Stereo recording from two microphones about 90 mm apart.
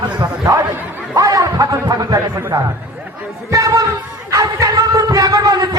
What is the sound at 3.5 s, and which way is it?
Music, 40° right (ahead or behind).